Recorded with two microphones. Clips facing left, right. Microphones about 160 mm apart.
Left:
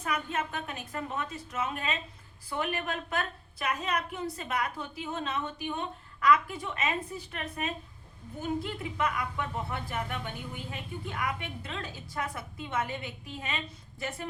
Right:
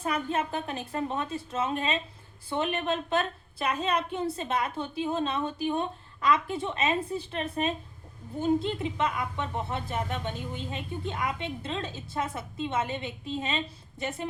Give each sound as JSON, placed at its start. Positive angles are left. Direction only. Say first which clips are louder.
{"t": 0.0, "sound": "speech", "louder": "right 4 dB", "side_deg": -30}